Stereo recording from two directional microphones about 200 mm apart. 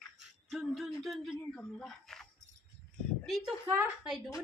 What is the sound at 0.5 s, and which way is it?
Speech, centre (ahead or behind).